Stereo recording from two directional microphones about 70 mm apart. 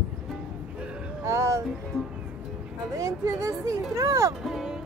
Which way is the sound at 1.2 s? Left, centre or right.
Right.